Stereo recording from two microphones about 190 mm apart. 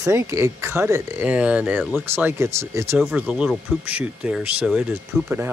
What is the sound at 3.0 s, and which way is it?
Speech, centre (ahead or behind).